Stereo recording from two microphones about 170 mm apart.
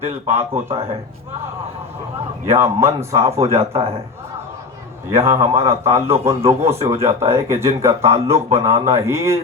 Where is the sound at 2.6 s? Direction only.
15° right (ahead or behind).